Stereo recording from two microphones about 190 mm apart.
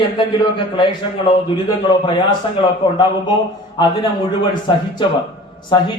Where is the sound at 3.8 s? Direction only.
25° left (ahead or behind).